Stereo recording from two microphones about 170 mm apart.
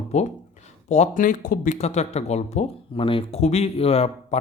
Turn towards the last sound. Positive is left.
turn(degrees=35)  # may be behind; listen again after turning